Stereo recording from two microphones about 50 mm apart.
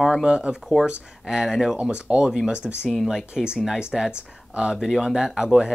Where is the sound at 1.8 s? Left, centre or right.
Right.